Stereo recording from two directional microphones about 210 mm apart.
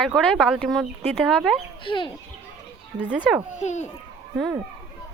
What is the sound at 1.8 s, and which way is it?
Speech, 25° left (ahead or behind).